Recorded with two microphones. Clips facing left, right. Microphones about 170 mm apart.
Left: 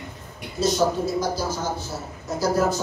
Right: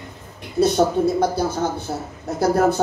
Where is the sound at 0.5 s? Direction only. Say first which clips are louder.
Right 5 dB; 60° right (ahead or behind).